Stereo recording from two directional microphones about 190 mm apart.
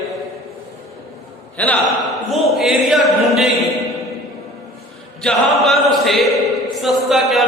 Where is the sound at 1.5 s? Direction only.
10° left (ahead or behind).